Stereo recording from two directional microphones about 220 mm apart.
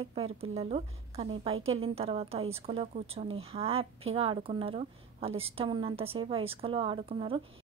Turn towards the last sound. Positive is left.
turn(degrees=-25)  # may be behind; listen again after turning